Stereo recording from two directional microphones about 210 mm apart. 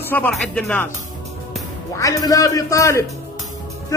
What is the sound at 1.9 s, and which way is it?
Speech, 15° left (ahead or behind).